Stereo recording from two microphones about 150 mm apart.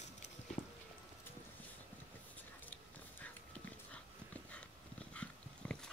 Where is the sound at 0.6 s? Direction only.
55° left (ahead or behind).